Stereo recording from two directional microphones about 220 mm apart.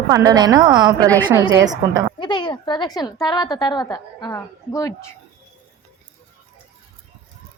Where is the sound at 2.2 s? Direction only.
20° left (ahead or behind).